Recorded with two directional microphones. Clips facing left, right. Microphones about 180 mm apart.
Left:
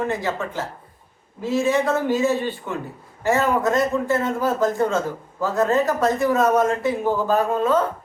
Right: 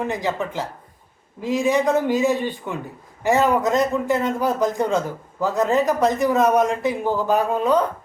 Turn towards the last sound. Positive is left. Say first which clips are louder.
# even
turn(degrees=-15)  # may be behind; listen again after turning